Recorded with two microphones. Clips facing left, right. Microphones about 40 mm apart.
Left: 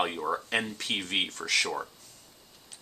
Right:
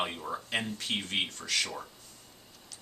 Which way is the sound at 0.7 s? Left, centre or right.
Left.